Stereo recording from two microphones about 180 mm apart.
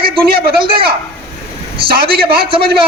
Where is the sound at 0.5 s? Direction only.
30° right (ahead or behind).